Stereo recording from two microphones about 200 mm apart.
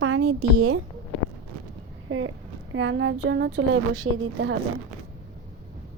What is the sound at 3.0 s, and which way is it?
Speech, 65° right (ahead or behind).